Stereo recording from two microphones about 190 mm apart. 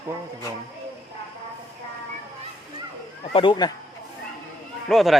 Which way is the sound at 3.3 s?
25° left (ahead or behind).